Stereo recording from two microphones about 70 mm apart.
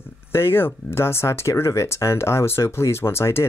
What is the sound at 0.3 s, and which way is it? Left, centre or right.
Speech, left.